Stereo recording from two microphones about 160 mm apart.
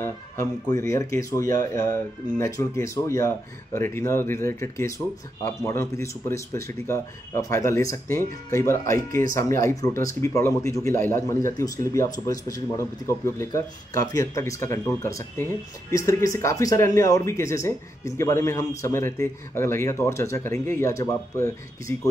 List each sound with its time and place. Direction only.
0.0 s a man's voice: 20° left (ahead or behind)